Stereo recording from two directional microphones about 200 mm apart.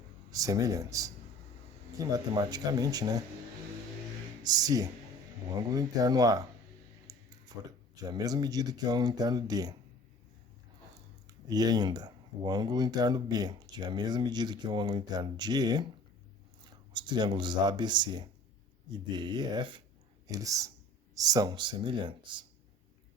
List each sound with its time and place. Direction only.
0.3 s speech: 15° right (ahead or behind)
4.4 s speech: 20° right (ahead or behind)
7.1 s a sound: 20° right (ahead or behind)
8.0 s speech: 20° right (ahead or behind)
11.3 s speech: 20° right (ahead or behind)
16.9 s speech: 20° right (ahead or behind)